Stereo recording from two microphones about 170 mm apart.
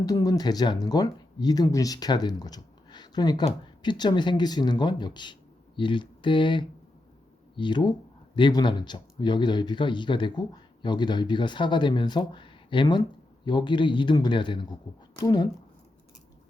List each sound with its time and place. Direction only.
0.0 s speech: 20° left (ahead or behind)